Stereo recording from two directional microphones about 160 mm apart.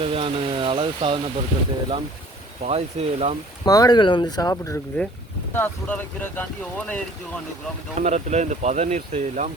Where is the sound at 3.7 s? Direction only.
25° left (ahead or behind); by 7.0 s 10° left (ahead or behind).